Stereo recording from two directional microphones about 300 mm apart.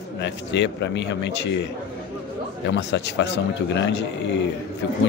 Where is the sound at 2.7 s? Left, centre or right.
Left.